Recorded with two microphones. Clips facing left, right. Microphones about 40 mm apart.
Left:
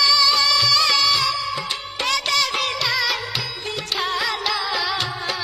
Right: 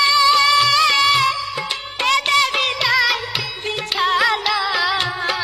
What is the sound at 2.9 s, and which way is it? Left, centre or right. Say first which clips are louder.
Music: right 8 dB; centre.